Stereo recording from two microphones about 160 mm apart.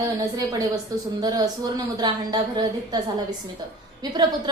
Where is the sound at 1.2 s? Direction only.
25° right (ahead or behind).